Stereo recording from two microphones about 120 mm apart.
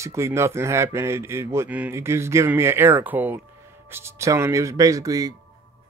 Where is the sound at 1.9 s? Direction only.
20° right (ahead or behind).